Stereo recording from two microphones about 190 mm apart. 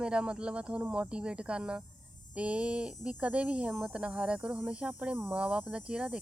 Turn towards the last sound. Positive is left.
turn(degrees=-5)  # may be behind; listen again after turning